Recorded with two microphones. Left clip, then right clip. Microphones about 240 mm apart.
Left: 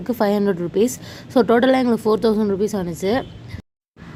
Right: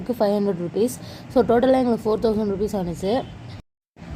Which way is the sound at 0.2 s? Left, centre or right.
Left.